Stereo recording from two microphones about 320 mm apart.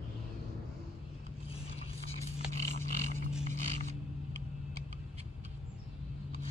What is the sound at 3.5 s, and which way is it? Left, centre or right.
Creak, right.